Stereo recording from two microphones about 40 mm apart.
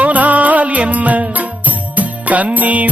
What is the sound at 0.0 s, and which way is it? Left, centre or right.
Music, right.